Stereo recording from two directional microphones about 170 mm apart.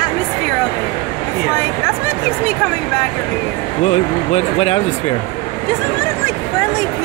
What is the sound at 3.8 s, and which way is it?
Speech, 40° left (ahead or behind).